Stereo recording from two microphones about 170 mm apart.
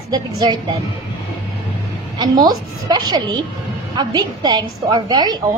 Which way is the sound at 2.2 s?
25° right (ahead or behind).